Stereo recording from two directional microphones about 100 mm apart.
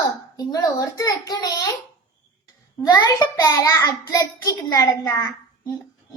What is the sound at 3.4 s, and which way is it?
A child's voice, 30° left (ahead or behind).